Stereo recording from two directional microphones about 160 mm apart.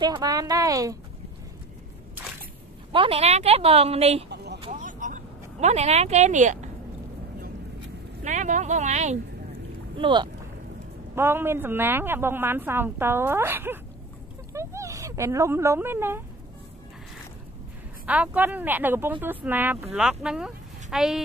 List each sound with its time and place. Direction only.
0.0 s a woman's voice: 25° right (ahead or behind)
2.9 s speech: 35° right (ahead or behind)
4.7 s a sound: 55° right (ahead or behind)
8.2 s speech: 50° right (ahead or behind)
9.9 s a woman's voice: 30° right (ahead or behind)
11.1 s speech: 15° right (ahead or behind)
18.0 s speech: 10° right (ahead or behind)